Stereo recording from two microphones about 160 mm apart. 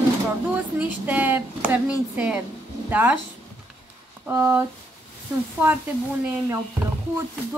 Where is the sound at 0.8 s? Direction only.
10° right (ahead or behind).